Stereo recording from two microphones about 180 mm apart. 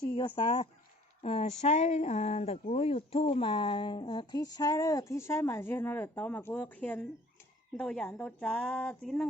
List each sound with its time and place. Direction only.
0.3 s speech: 30° left (ahead or behind); by 9.0 s 5° left (ahead or behind)